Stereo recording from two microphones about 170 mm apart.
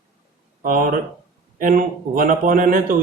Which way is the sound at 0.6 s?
55° right (ahead or behind).